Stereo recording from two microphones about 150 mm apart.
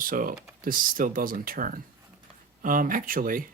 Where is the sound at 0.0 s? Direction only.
65° right (ahead or behind).